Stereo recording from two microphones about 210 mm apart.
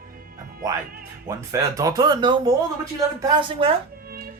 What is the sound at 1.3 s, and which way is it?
Speech, 15° right (ahead or behind).